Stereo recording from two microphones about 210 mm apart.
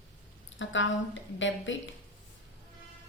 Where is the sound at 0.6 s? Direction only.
65° left (ahead or behind).